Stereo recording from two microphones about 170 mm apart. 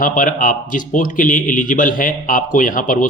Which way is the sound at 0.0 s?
50° left (ahead or behind).